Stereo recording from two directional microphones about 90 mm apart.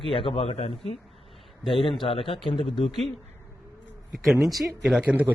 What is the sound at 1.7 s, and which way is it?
Speech, 75° left (ahead or behind).